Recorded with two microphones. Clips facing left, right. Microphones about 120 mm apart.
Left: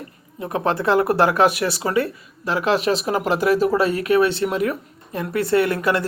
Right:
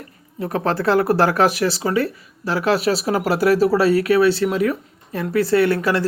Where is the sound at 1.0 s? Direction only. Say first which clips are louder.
Even; 35° right (ahead or behind).